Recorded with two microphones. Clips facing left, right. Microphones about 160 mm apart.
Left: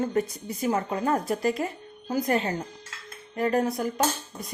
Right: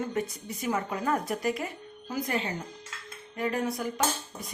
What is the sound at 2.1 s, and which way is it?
Speech, 45° left (ahead or behind).